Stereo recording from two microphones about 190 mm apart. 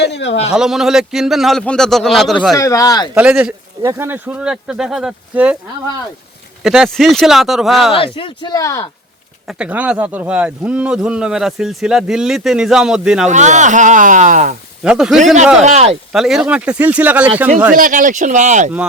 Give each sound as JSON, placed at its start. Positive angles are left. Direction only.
{"t": 0.0, "sound": "a man's voice", "side_deg": 65}
{"t": 0.5, "sound": "speech", "side_deg": -5}
{"t": 2.6, "sound": "speech", "side_deg": 15}
{"t": 3.2, "sound": "speech", "side_deg": -5}
{"t": 6.6, "sound": "speech", "side_deg": 0}
{"t": 7.9, "sound": "speech", "side_deg": 30}
{"t": 9.5, "sound": "speech", "side_deg": -5}
{"t": 13.2, "sound": "speech", "side_deg": -40}
{"t": 14.8, "sound": "speech", "side_deg": -5}
{"t": 15.6, "sound": "speech", "side_deg": -35}
{"t": 16.1, "sound": "speech", "side_deg": 0}
{"t": 17.7, "sound": "speech", "side_deg": -45}